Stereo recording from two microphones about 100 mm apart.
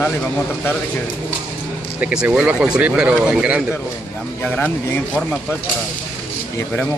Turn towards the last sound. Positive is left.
turn(degrees=15)  # may be behind; listen again after turning